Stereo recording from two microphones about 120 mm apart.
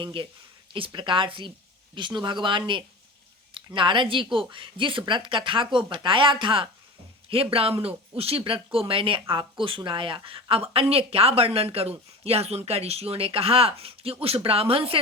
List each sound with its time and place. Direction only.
0.0 s speech: 45° right (ahead or behind)